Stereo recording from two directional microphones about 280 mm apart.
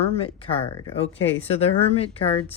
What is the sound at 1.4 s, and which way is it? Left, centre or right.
Speech, left.